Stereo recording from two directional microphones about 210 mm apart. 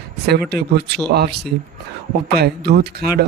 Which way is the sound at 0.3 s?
50° right (ahead or behind).